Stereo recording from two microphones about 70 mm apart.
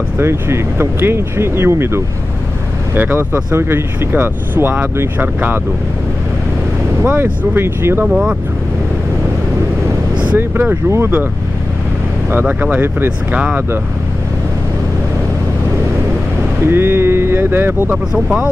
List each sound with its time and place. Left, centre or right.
0.2 s speech: right
7.5 s speech: right
8.0 s speech: centre
10.1 s speech: right
12.7 s speech: right
13.3 s speech: centre
16.6 s speech: right
18.1 s speech: centre